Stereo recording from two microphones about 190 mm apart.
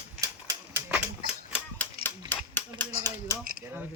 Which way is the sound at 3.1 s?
15° left (ahead or behind).